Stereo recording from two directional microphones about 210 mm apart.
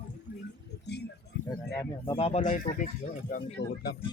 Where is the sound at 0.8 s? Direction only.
50° left (ahead or behind).